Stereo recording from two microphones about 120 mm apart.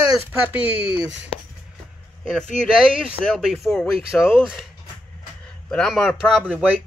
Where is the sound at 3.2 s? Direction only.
5° left (ahead or behind).